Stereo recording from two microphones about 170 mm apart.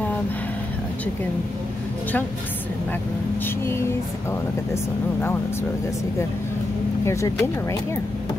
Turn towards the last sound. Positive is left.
turn(degrees=15)  # may be behind; listen again after turning